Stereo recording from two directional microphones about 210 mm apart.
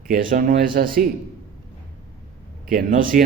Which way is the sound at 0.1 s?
40° right (ahead or behind).